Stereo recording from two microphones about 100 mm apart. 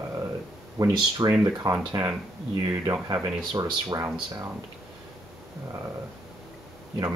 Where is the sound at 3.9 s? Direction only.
25° right (ahead or behind).